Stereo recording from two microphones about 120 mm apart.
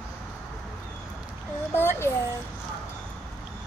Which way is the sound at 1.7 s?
20° left (ahead or behind).